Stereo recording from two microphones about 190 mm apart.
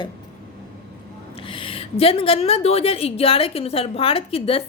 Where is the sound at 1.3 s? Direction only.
30° left (ahead or behind).